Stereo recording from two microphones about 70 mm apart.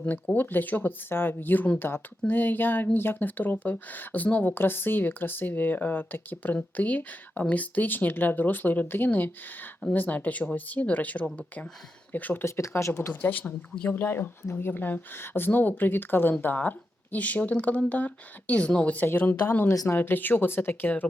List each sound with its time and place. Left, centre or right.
0.3 s speech: left
12.5 s speech: left; by 19.0 s centre
19.0 s speech: left